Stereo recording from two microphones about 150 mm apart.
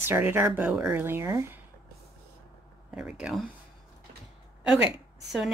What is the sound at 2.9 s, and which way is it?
Speech, 5° right (ahead or behind).